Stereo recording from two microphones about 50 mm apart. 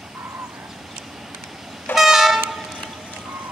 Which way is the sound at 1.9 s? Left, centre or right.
Centre.